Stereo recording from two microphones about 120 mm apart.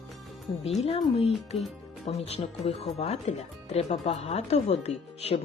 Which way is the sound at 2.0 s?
60° left (ahead or behind).